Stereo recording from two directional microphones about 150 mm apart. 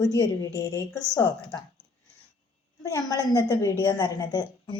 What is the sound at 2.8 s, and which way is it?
Speech, 25° left (ahead or behind).